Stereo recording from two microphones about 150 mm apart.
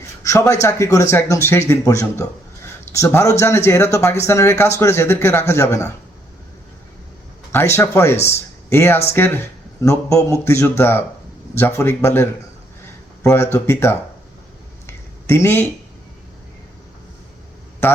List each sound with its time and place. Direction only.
0.2 s a man's voice: 20° left (ahead or behind)
7.5 s a man's voice: 15° left (ahead or behind)
14.8 s a sound: 15° left (ahead or behind)